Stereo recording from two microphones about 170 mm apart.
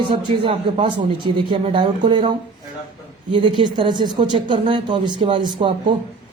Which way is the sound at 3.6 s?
25° right (ahead or behind).